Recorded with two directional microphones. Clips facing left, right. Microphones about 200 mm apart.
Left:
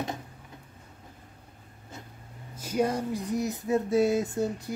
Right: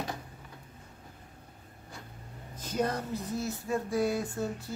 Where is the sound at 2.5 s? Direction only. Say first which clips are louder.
Left 4 dB; 10° left (ahead or behind).